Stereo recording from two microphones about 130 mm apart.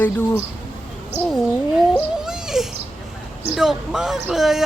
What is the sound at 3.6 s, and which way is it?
Speech, 5° right (ahead or behind).